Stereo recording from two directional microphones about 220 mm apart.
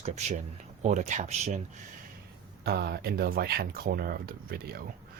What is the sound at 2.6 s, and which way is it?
Speech, 45° right (ahead or behind).